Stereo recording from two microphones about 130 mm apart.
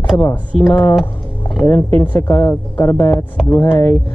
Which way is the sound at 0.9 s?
Centre (ahead or behind).